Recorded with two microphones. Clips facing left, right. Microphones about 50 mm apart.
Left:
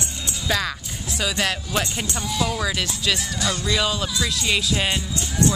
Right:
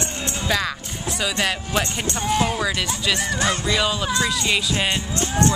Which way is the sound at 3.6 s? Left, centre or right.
Centre.